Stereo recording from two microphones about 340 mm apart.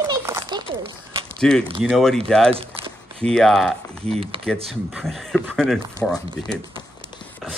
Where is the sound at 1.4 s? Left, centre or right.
Centre.